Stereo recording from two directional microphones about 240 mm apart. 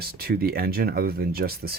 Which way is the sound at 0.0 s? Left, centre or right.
Right.